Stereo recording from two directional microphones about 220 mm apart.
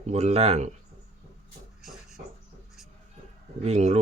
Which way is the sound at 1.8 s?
Centre (ahead or behind).